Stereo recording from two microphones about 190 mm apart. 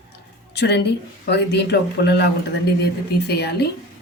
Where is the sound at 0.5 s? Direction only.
60° left (ahead or behind).